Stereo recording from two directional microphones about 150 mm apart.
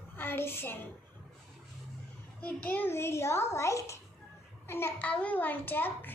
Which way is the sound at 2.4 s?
10° left (ahead or behind).